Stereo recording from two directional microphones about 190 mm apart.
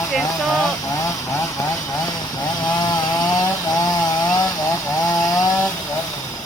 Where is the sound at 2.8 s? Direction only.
20° left (ahead or behind).